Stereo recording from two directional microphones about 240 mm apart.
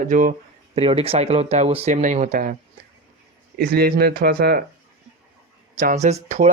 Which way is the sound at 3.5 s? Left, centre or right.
Right.